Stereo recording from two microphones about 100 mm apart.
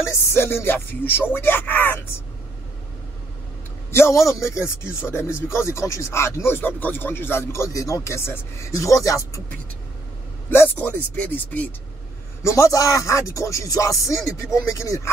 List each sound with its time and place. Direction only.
0.1 s speech: 25° left (ahead or behind)
3.9 s a man's voice: 25° left (ahead or behind)
10.5 s speech: 20° left (ahead or behind)
12.4 s speech: 30° left (ahead or behind)